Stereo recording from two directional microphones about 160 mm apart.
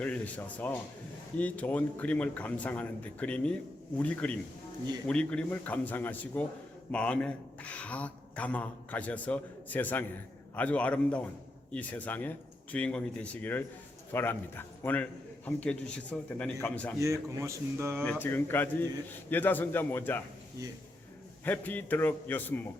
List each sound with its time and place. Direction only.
0.0 s a man's voice: 10° left (ahead or behind)
16.1 s a man's voice: 5° left (ahead or behind)
17.0 s speech: 20° right (ahead or behind)
18.0 s a man's voice: 10° left (ahead or behind)
21.4 s a man's voice: 10° left (ahead or behind)